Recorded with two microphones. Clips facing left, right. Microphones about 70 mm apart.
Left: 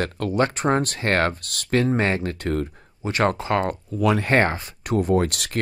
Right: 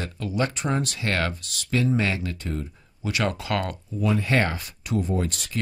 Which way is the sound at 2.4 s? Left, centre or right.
Left.